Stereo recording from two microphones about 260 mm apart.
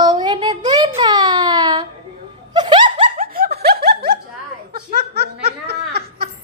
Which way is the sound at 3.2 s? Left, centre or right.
Right.